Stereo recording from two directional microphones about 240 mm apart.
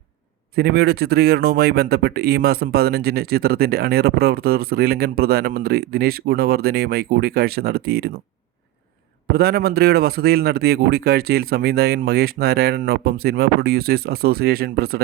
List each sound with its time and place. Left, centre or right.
0.5 s a man's voice: right
9.3 s a man's voice: right